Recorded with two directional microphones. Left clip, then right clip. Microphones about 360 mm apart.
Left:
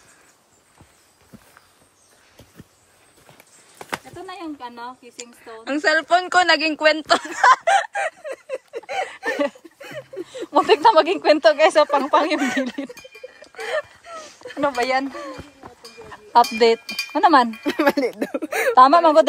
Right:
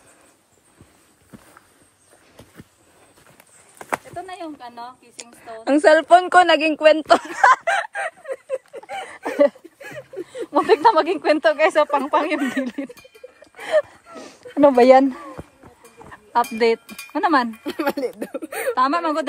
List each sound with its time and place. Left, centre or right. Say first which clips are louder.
5.1 s a woman's voice: right 1 dB; centre
9.1 s a sound: right 10 dB; centre
10.2 s speech: left 1 dB; centre
13.7 s dog: right 7 dB; centre
16.1 s speech: left 5 dB; centre
16.8 s wind chime: left 10 dB; centre
17.1 s wind chime: left 4 dB; centre
17.5 s speech: left 5 dB; centre